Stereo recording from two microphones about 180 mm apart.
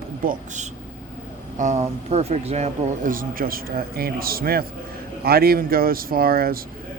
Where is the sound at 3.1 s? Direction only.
50° right (ahead or behind).